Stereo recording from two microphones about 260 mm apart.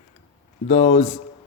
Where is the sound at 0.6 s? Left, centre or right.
Left.